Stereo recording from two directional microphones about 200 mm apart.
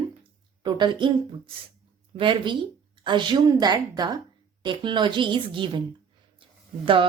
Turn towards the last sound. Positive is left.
turn(degrees=-25)  # may be behind; listen again after turning